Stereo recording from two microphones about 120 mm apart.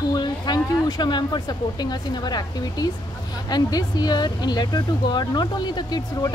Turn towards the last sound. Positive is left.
turn(degrees=35)  # may be behind; listen again after turning